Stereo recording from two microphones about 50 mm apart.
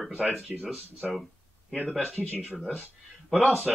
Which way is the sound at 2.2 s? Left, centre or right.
Left.